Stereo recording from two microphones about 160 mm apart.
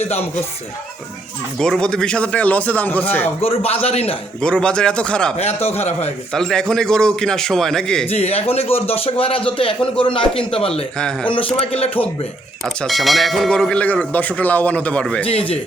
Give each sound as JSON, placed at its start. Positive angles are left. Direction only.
{"t": 0.0, "sound": "a man's voice", "side_deg": 40}
{"t": 1.5, "sound": "speech", "side_deg": 5}
{"t": 3.4, "sound": "a man's voice", "side_deg": 40}
{"t": 4.4, "sound": "a man's voice", "side_deg": 5}
{"t": 5.6, "sound": "a man's voice", "side_deg": 40}
{"t": 6.3, "sound": "a man's voice", "side_deg": 5}
{"t": 8.0, "sound": "a man's voice", "side_deg": 40}
{"t": 10.9, "sound": "a man's voice", "side_deg": 5}
{"t": 11.3, "sound": "a man's voice", "side_deg": 35}
{"t": 12.6, "sound": "speech", "side_deg": 0}